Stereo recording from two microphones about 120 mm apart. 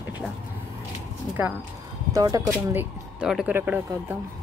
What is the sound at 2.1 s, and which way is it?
Speech, 30° right (ahead or behind).